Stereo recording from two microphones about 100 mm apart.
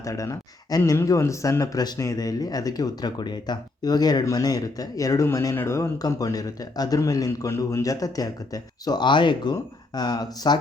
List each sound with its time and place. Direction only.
0.0 s speech: 35° left (ahead or behind)